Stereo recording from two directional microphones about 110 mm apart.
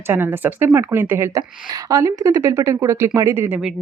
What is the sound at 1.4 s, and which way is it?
Speech, 35° right (ahead or behind).